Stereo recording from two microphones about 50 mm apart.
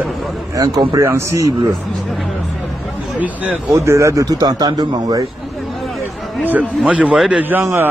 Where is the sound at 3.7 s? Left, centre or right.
Right.